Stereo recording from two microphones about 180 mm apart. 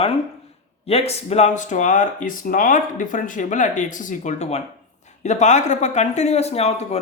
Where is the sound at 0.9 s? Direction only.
35° left (ahead or behind).